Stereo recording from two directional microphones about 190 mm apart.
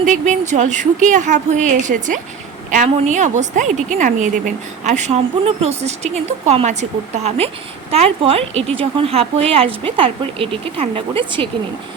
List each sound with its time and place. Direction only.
0.0 s a woman's voice: 40° right (ahead or behind)